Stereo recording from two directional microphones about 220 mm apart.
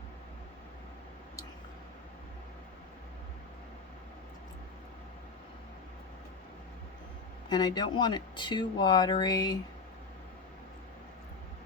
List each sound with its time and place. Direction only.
7.5 s speech: 20° left (ahead or behind)